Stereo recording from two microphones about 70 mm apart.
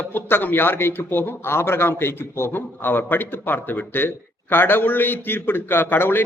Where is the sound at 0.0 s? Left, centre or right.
Left.